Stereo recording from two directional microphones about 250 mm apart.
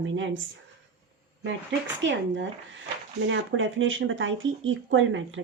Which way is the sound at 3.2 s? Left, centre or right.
Right.